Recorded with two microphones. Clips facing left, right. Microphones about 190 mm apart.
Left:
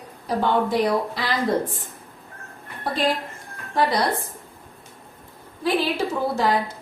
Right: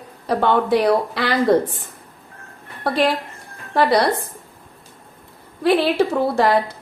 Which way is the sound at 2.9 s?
70° right (ahead or behind).